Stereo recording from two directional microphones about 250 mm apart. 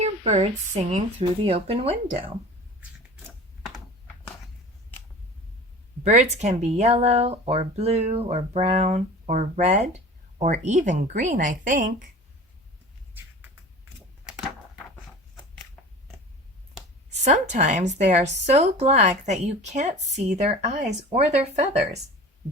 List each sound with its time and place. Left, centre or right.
0.0 s speech: right
2.8 s typing: centre
6.0 s a woman's voice: right
17.1 s speech: right